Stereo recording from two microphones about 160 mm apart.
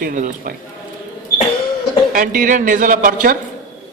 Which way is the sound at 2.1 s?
55° right (ahead or behind).